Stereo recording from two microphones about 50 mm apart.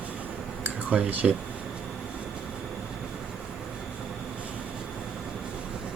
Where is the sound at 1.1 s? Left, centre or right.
Right.